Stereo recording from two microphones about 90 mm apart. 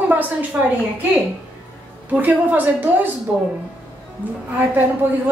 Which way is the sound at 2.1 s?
20° right (ahead or behind).